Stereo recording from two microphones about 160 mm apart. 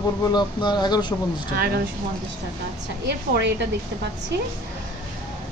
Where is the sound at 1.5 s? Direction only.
70° right (ahead or behind).